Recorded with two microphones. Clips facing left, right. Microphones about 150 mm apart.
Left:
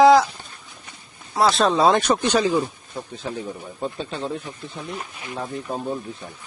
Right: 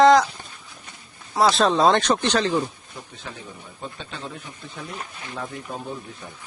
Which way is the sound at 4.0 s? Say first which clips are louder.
Left 7 dB; 35° left (ahead or behind).